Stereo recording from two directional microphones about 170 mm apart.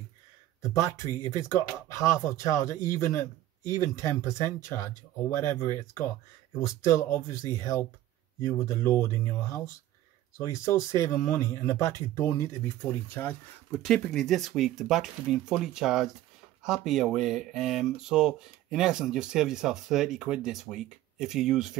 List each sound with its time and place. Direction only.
0.6 s speech: 20° left (ahead or behind)
10.3 s speech: 20° left (ahead or behind); by 21.7 s 5° right (ahead or behind)